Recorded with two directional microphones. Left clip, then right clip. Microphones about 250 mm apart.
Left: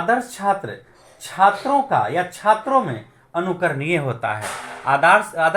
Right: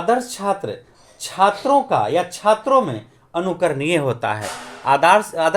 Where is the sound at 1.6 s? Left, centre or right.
Right.